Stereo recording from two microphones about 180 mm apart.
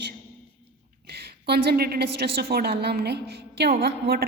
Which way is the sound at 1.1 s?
65° right (ahead or behind).